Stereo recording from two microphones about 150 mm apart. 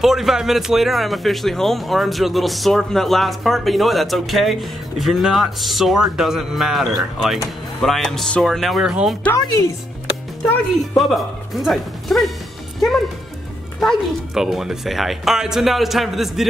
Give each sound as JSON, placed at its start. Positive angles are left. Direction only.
{"t": 0.0, "sound": "a man's voice", "side_deg": 0}
{"t": 9.4, "sound": "speech", "side_deg": 25}
{"t": 10.8, "sound": "speech", "side_deg": 0}
{"t": 13.7, "sound": "a man's voice", "side_deg": 0}